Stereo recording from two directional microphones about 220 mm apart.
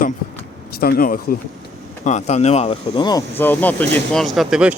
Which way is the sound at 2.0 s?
30° left (ahead or behind).